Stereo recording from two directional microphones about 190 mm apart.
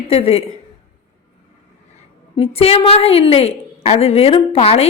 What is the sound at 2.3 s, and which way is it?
A woman's voice, 30° left (ahead or behind).